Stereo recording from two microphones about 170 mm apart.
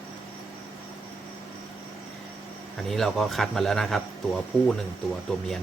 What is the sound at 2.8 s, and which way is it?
Speech, centre (ahead or behind).